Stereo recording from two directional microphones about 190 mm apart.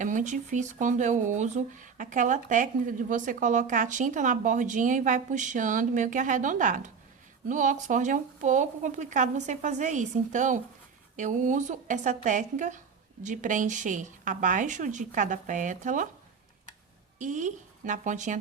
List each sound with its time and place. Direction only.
0.0 s speech: 40° right (ahead or behind)
17.2 s speech: 40° right (ahead or behind)